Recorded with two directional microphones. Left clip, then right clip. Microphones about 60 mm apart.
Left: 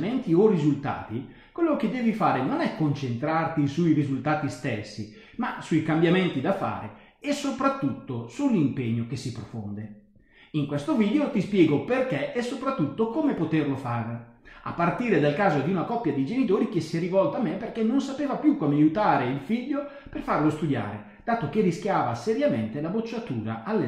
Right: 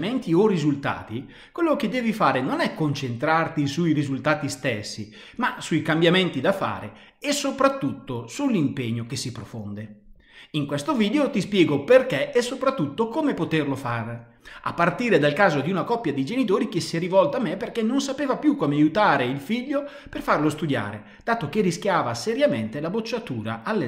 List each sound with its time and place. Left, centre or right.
0.0 s speech: right
10.5 s speech: right